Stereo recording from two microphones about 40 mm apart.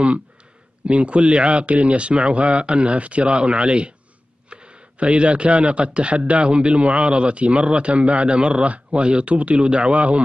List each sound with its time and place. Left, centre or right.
0.8 s a man's voice: right